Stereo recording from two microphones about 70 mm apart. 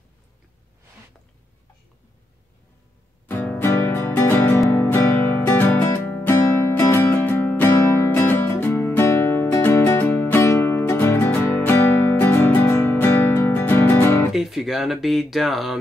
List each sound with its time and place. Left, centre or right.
3.3 s music: left
14.3 s speech: centre